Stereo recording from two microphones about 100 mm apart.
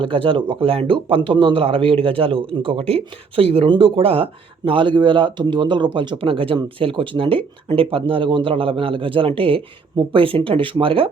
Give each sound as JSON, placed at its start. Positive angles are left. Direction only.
{"t": 0.0, "sound": "speech", "side_deg": -60}